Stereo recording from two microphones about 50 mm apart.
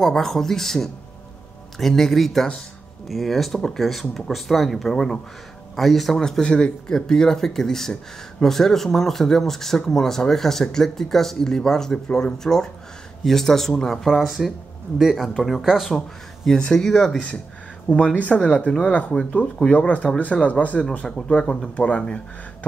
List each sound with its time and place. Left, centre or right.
0.0 s speech: centre
6.2 s speech: centre
16.4 s speech: centre
17.9 s speech: left